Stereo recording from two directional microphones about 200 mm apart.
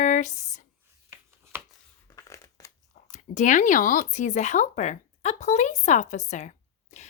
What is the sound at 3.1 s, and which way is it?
A woman's voice, 35° left (ahead or behind).